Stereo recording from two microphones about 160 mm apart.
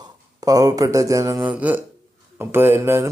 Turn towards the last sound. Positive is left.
turn(degrees=-15)  # may be behind; listen again after turning